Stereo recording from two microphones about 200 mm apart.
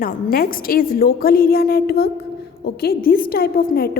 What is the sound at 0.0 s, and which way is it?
A woman's voice, 45° left (ahead or behind).